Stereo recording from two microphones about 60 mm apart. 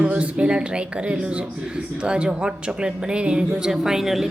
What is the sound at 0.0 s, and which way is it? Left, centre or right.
A woman's voice, centre.